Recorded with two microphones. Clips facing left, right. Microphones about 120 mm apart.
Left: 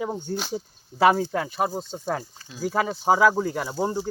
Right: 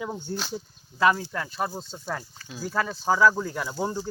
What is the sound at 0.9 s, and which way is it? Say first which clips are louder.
Speech: left 4 dB; 35° left (ahead or behind).